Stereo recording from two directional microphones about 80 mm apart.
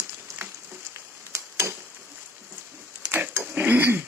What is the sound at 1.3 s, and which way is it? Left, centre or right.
Tick-tock, right.